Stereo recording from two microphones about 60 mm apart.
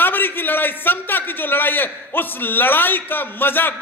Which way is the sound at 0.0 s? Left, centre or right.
Left.